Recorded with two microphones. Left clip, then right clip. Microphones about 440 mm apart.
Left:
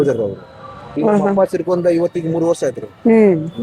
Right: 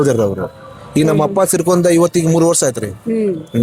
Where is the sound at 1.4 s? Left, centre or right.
Right.